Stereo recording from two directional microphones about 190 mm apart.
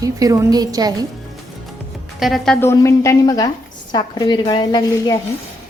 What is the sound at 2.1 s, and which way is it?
A woman's voice, centre (ahead or behind).